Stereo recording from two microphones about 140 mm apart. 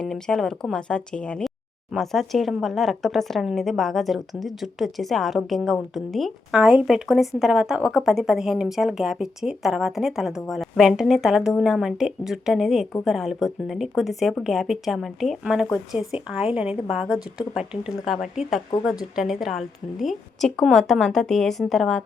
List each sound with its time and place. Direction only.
0.0 s speech: 5° left (ahead or behind)